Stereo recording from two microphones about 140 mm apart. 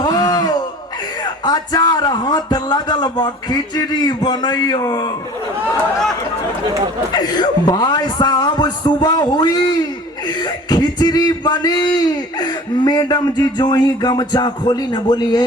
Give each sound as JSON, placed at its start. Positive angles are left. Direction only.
{"t": 0.0, "sound": "a sound", "side_deg": 30}
{"t": 1.2, "sound": "speech", "side_deg": 30}
{"t": 7.1, "sound": "speech", "side_deg": 30}